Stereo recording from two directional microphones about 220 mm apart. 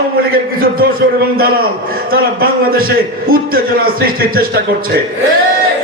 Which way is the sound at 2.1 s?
45° right (ahead or behind).